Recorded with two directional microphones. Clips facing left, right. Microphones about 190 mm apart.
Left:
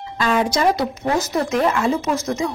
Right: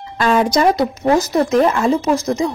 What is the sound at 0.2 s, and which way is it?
Speech, 40° right (ahead or behind).